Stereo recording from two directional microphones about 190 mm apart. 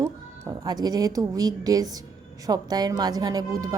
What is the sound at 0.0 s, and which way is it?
A woman's voice, 20° right (ahead or behind).